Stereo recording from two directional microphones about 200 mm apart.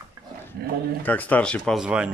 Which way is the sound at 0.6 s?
50° right (ahead or behind).